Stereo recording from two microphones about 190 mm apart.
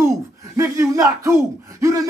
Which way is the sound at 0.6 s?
15° right (ahead or behind).